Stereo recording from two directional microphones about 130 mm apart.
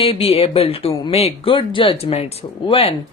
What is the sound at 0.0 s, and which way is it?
Speech, 45° left (ahead or behind).